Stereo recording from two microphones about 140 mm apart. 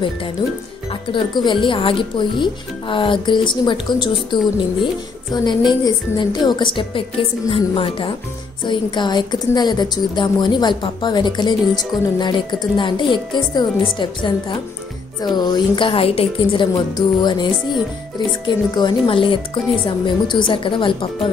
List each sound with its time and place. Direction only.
1.1 s a woman's voice: 35° left (ahead or behind)
16.7 s a woman's voice: 30° left (ahead or behind)